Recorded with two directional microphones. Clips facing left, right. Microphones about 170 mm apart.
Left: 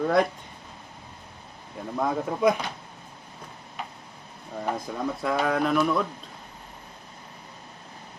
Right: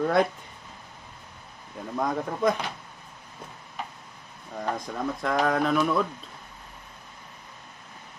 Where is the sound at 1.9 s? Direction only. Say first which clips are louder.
Left 1 dB; 5° left (ahead or behind).